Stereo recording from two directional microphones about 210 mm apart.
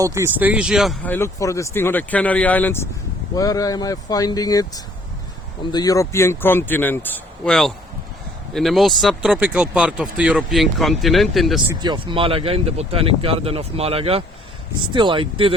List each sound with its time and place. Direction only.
0.0 s speech: 15° right (ahead or behind)
11.7 s speech: 20° right (ahead or behind)